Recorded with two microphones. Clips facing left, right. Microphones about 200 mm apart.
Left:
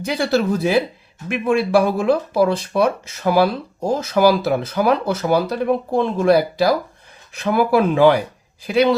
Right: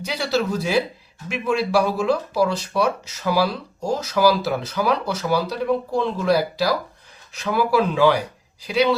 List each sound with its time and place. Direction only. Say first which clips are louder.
0.0 s speech: left 4 dB; 50° left (ahead or behind)